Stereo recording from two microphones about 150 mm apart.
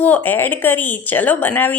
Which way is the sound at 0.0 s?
10° left (ahead or behind).